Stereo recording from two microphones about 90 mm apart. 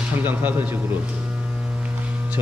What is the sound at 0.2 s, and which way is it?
Speech, 20° right (ahead or behind).